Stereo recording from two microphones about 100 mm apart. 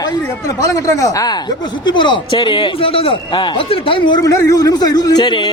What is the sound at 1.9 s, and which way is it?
A man's voice, 50° left (ahead or behind).